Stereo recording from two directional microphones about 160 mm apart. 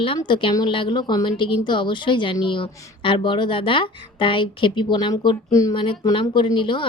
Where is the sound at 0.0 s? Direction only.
30° left (ahead or behind).